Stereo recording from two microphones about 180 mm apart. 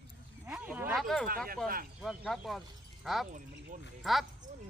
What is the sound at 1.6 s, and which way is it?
Speech, 55° right (ahead or behind).